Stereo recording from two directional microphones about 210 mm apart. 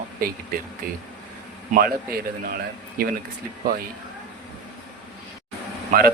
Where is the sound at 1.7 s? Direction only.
45° right (ahead or behind).